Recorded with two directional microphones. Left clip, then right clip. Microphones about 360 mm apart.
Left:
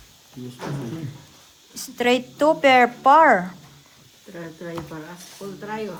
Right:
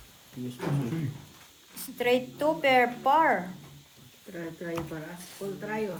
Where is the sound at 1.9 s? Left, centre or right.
Left.